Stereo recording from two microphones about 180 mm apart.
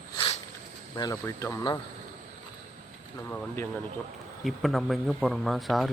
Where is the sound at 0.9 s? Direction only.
20° left (ahead or behind).